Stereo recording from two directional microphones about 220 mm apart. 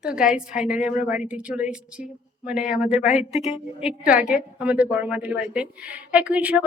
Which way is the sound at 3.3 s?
30° left (ahead or behind).